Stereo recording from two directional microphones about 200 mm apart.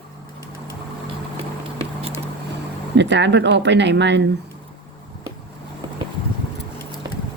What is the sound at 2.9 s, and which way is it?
Speech, 60° right (ahead or behind).